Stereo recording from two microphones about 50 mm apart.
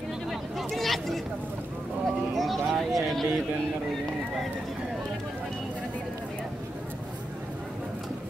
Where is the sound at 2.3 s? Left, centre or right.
Centre.